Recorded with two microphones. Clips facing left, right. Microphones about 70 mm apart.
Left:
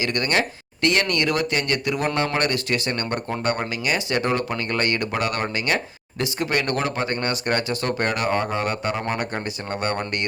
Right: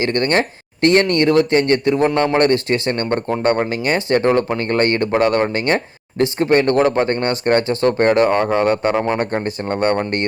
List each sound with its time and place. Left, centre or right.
0.0 s speech: right